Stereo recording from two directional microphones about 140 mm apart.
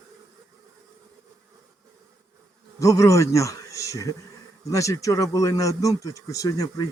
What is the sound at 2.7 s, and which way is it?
Speech, 20° left (ahead or behind).